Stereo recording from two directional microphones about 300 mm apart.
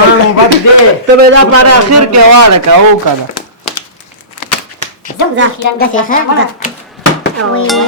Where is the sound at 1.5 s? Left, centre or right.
Right.